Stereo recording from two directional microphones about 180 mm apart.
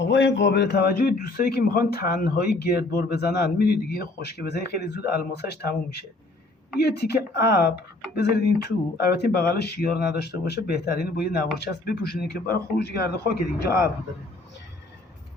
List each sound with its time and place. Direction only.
0.1 s a man's voice: 85° left; by 13.7 s 60° left (ahead or behind)